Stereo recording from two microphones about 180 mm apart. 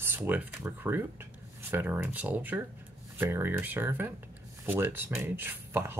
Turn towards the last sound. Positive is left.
turn(degrees=-10)  # may be behind; listen again after turning